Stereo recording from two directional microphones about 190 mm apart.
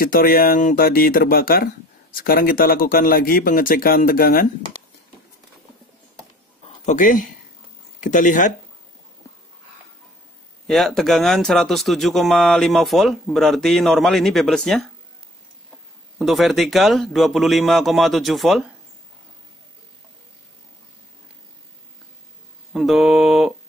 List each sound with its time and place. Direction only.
0.0 s speech: 50° left (ahead or behind)
6.9 s speech: 40° left (ahead or behind)
10.7 s speech: centre (ahead or behind)
16.2 s speech: centre (ahead or behind)
22.7 s speech: centre (ahead or behind)